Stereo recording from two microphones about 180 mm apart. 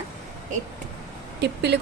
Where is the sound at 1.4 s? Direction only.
70° right (ahead or behind).